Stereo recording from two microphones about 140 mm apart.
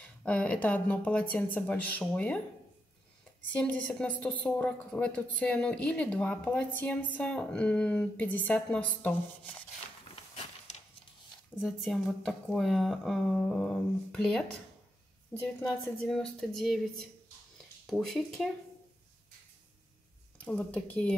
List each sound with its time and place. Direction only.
0.0 s a woman's voice: 10° left (ahead or behind)
3.5 s a woman's voice: 10° left (ahead or behind)
10.1 s a sound: 45° left (ahead or behind)
11.6 s speech: centre (ahead or behind)
20.3 s a woman's voice: 10° left (ahead or behind)